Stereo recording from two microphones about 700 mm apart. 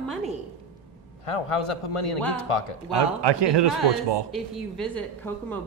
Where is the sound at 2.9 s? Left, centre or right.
Right.